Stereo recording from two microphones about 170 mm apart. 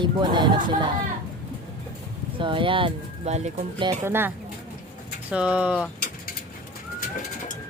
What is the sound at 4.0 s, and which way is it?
Speech, 15° right (ahead or behind).